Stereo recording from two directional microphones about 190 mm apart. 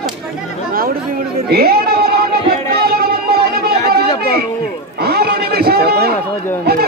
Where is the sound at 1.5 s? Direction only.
55° right (ahead or behind).